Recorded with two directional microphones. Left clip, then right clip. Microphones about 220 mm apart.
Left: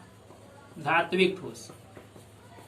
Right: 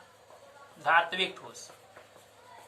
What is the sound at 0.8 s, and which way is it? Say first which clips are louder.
Speech: left 1 dB; 10° right (ahead or behind).